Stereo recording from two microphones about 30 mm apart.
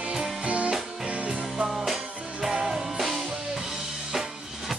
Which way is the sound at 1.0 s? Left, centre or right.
Right.